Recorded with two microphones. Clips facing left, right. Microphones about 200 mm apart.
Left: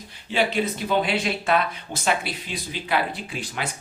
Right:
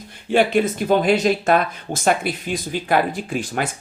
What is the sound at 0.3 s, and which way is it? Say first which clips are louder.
Speech: right 6 dB; 50° right (ahead or behind).